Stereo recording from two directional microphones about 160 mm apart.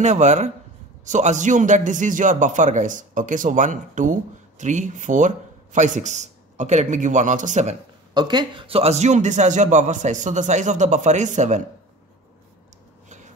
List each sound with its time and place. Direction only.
0.0 s a man's voice: 45° right (ahead or behind)
8.1 s a man's voice: 25° right (ahead or behind); by 11.6 s 50° right (ahead or behind)